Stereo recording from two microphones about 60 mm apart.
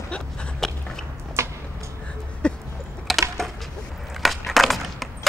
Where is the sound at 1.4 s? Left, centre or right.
Right.